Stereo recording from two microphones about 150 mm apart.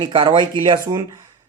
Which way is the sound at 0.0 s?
30° right (ahead or behind).